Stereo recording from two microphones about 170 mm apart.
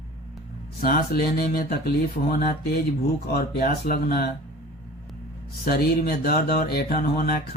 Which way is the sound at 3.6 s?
60° left (ahead or behind).